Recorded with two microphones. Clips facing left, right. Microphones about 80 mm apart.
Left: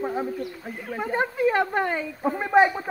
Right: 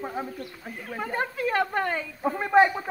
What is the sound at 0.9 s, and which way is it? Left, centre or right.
Speech, centre.